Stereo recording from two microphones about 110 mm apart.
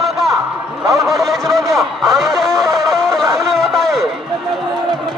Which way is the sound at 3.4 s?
5° left (ahead or behind).